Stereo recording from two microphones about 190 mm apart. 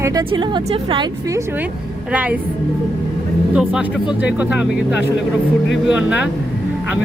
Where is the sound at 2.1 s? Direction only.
5° right (ahead or behind).